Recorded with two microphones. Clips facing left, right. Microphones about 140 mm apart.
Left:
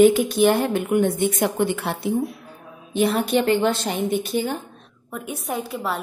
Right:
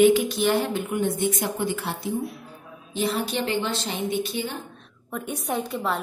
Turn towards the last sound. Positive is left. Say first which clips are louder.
# even
turn(degrees=0)  # may be behind; listen again after turning